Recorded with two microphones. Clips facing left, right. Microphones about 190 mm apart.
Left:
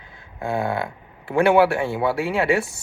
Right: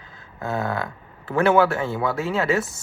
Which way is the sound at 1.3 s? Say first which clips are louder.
Left 2 dB; 15° left (ahead or behind).